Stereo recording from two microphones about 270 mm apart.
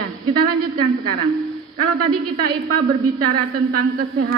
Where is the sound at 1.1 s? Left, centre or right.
Right.